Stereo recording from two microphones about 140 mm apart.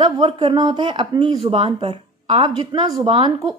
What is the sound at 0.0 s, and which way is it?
Speech, 35° right (ahead or behind).